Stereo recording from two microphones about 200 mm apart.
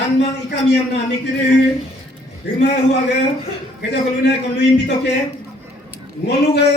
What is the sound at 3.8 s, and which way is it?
A man's voice, 60° left (ahead or behind).